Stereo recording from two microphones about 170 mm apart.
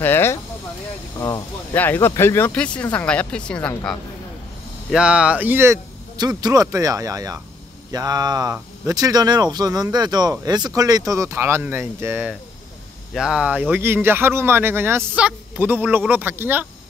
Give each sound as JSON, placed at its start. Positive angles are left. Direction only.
{"t": 0.0, "sound": "speech", "side_deg": 15}
{"t": 1.2, "sound": "speech", "side_deg": 25}
{"t": 1.8, "sound": "speech", "side_deg": 15}
{"t": 4.9, "sound": "speech", "side_deg": -5}